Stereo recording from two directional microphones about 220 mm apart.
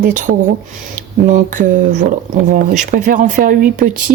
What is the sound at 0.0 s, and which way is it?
A woman's voice, 35° right (ahead or behind).